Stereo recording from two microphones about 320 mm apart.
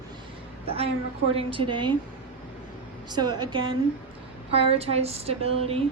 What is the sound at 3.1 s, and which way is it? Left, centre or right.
A woman's voice, centre.